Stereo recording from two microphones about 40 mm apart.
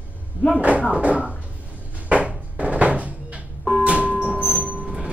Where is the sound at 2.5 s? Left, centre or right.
Right.